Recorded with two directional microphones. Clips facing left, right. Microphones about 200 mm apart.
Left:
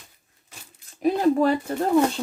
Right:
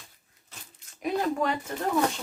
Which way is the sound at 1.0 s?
35° left (ahead or behind).